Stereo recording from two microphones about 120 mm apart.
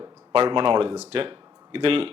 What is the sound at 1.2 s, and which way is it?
Speech, 50° right (ahead or behind).